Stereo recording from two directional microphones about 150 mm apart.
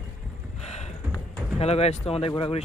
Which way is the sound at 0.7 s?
45° left (ahead or behind).